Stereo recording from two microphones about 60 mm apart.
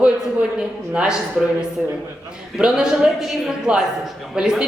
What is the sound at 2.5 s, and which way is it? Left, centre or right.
A man's voice, centre.